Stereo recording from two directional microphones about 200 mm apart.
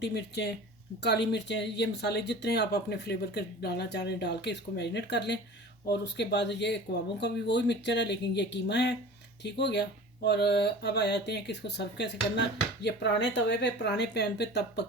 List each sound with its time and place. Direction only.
0.0 s speech: 55° left (ahead or behind)